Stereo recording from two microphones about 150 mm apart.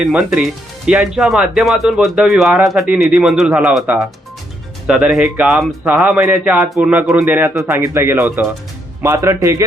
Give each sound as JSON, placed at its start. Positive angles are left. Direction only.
{"t": 0.0, "sound": "a man's voice", "side_deg": -5}